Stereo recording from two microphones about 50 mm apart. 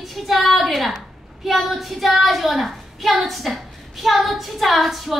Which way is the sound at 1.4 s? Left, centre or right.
Centre.